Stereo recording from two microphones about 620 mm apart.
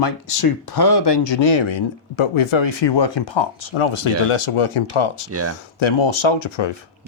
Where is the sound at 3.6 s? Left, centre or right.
Left.